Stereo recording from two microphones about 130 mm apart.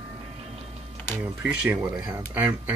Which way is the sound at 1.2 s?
10° right (ahead or behind).